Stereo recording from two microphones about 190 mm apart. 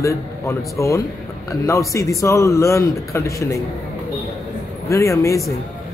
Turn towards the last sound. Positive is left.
turn(degrees=15)  # may be behind; listen again after turning